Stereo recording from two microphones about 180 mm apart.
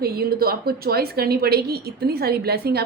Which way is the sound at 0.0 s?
60° right (ahead or behind).